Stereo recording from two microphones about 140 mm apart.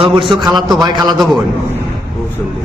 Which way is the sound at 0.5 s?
30° right (ahead or behind).